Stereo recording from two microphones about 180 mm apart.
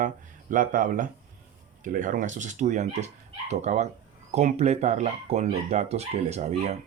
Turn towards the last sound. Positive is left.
turn(degrees=-40)  # may be behind; listen again after turning